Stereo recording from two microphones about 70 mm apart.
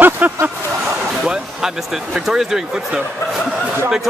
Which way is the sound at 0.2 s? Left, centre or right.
Right.